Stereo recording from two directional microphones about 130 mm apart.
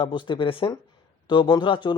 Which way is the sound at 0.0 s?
40° left (ahead or behind).